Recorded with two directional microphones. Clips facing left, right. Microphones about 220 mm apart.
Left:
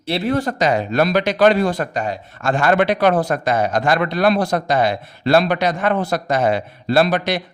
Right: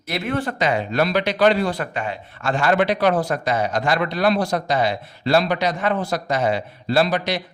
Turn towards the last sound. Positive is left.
turn(degrees=55)  # may be behind; listen again after turning